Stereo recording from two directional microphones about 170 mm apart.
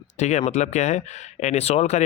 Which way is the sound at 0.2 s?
45° left (ahead or behind).